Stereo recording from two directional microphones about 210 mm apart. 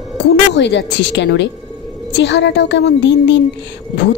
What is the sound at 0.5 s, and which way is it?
A woman's voice, 55° left (ahead or behind).